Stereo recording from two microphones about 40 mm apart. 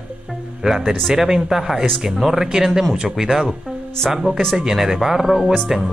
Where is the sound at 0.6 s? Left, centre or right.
Centre.